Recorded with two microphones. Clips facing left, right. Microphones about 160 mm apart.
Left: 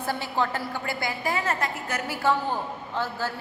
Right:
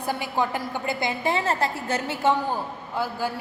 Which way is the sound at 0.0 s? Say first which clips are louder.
Right 1 dB; 15° right (ahead or behind).